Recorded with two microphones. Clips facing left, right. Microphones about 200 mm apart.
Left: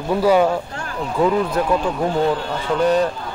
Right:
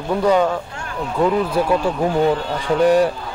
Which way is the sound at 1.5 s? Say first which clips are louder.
Right 1 dB; 10° right (ahead or behind).